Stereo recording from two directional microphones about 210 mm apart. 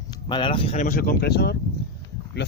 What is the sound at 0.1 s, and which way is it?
Speech, 20° left (ahead or behind).